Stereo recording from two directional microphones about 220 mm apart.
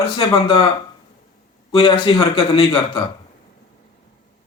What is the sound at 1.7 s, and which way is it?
A man's voice, 25° left (ahead or behind).